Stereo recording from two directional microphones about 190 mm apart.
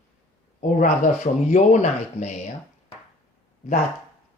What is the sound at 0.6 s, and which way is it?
Speech, 40° left (ahead or behind).